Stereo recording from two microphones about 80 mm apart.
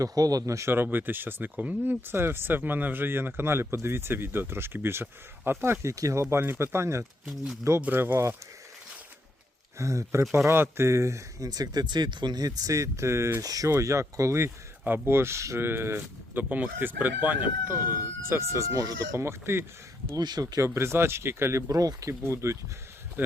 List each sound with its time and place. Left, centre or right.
0.0 s speech: right
6.3 s speech: right
7.8 s speech: right
9.7 s speech: right
20.1 s speech: right
20.6 s speech: right
21.7 s speech: right
22.2 s speech: right